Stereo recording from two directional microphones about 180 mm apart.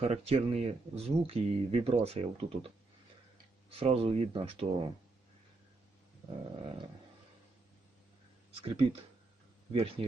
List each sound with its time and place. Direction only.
0.0 s speech: 35° right (ahead or behind)
6.6 s dog: 25° right (ahead or behind)
8.6 s speech: 35° right (ahead or behind)